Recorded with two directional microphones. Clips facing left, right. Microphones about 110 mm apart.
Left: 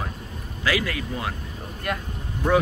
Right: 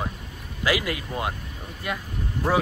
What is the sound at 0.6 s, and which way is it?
Speech, 20° right (ahead or behind).